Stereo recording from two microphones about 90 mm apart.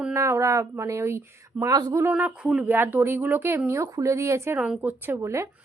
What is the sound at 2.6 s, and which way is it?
Speech, 20° right (ahead or behind).